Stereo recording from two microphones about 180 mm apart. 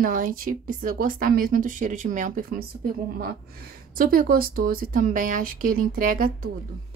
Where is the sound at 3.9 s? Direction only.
55° right (ahead or behind).